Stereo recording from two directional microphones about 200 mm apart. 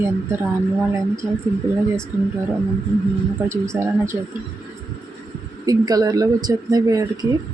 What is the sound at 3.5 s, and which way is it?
Speech, 15° right (ahead or behind).